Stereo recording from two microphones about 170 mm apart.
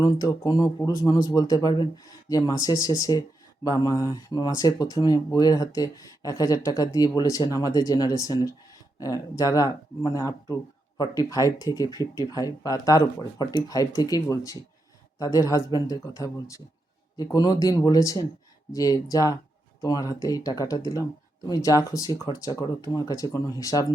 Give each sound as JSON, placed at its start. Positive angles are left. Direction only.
{"t": 0.0, "sound": "speech", "side_deg": 20}